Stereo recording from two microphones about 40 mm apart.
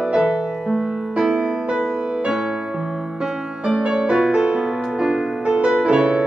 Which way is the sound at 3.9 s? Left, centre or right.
Centre.